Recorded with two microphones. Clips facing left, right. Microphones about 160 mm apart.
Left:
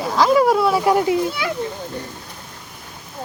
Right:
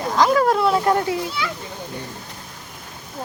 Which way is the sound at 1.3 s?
50° left (ahead or behind).